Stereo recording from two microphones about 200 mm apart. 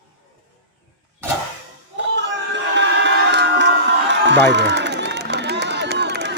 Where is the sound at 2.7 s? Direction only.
60° right (ahead or behind).